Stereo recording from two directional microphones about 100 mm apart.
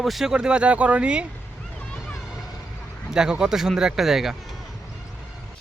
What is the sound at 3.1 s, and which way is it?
Speech, 5° right (ahead or behind).